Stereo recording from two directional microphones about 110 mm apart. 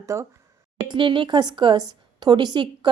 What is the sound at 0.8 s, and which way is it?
Speech, 45° right (ahead or behind).